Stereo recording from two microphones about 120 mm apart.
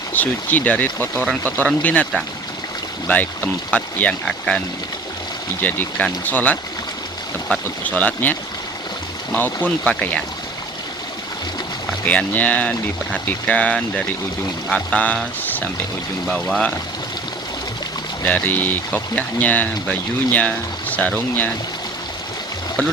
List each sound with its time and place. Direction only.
0.1 s speech: 15° left (ahead or behind)
1.1 s speech: centre (ahead or behind)
1.5 s speech: 15° left (ahead or behind)
3.1 s speech: 15° left (ahead or behind)
5.6 s speech: 15° left (ahead or behind)
7.9 s speech: 15° left (ahead or behind)
12.0 s speech: 15° left (ahead or behind)
16.3 s speech: centre (ahead or behind)
18.3 s speech: 15° left (ahead or behind)